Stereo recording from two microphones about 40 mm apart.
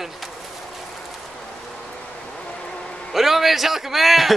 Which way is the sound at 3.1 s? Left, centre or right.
Centre.